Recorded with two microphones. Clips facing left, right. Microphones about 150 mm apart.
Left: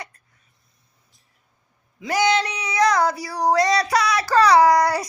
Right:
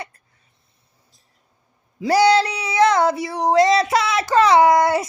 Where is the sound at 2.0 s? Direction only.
35° right (ahead or behind).